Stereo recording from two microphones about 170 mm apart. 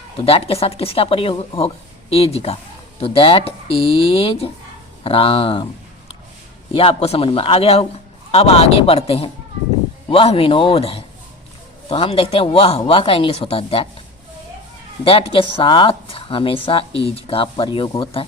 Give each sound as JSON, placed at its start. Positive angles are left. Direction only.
{"t": 0.3, "sound": "speech", "side_deg": 35}
{"t": 6.7, "sound": "speech", "side_deg": 35}
{"t": 15.0, "sound": "speech", "side_deg": 30}